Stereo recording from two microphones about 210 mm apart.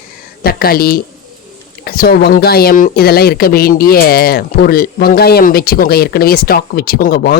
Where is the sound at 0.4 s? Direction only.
45° left (ahead or behind).